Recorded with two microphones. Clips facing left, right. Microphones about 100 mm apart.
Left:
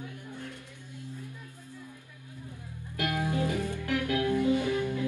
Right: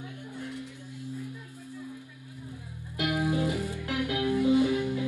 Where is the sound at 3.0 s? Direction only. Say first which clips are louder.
Right 2 dB; 20° right (ahead or behind).